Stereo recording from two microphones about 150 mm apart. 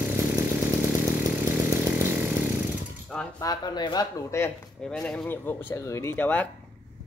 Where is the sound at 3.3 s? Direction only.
25° left (ahead or behind).